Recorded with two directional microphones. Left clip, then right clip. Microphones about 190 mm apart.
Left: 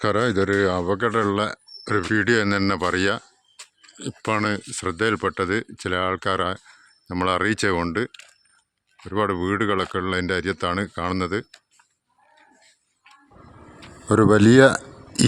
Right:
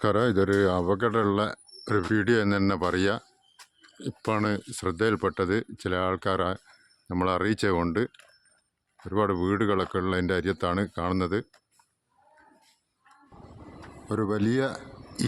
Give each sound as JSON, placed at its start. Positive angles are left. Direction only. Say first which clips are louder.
{"t": 0.0, "sound": "speech", "louder": "left 3 dB", "side_deg": 0}
{"t": 14.1, "sound": "a man's voice", "louder": "left 12 dB", "side_deg": 40}